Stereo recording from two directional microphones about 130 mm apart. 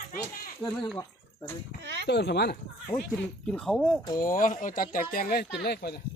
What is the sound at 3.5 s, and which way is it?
Speech, 5° left (ahead or behind).